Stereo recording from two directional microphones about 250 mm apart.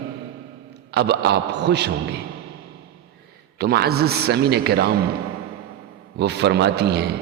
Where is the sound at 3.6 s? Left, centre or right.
Right.